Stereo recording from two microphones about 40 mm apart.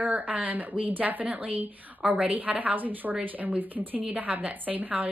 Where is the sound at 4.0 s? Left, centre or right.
Right.